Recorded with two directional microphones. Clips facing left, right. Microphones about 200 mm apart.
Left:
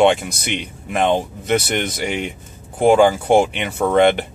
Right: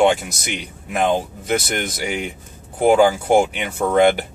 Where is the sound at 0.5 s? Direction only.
5° right (ahead or behind).